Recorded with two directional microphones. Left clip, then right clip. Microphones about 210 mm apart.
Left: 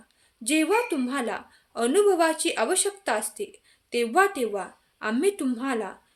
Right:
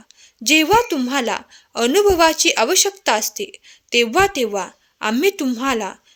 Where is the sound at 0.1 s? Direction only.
40° right (ahead or behind).